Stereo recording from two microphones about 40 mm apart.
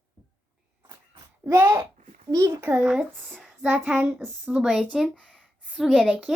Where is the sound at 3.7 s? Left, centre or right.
Right.